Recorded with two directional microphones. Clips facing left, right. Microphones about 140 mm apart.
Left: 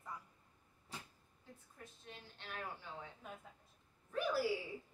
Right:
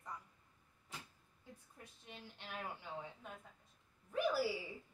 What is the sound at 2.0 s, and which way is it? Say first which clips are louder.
Speech: right 2 dB; 15° right (ahead or behind).